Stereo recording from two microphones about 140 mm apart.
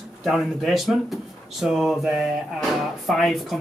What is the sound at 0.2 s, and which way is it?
Speech, centre (ahead or behind).